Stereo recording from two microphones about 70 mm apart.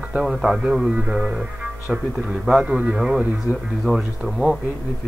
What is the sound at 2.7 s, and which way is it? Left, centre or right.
Speech, centre.